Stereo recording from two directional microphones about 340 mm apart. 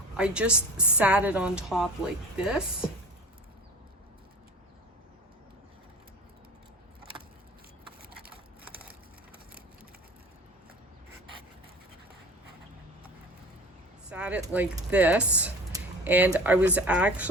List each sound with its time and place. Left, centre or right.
0.2 s a woman's voice: centre
8.1 s a sound: right
14.1 s speech: centre